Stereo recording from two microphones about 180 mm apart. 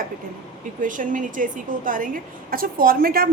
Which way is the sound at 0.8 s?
45° right (ahead or behind).